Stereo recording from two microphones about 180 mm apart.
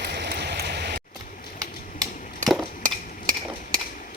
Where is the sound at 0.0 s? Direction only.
65° right (ahead or behind).